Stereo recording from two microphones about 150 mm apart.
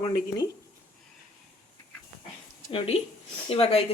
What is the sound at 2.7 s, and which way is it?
A woman's voice, 40° left (ahead or behind).